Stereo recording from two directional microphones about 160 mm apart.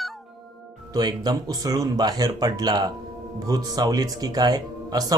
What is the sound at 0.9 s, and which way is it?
Speech, 25° right (ahead or behind).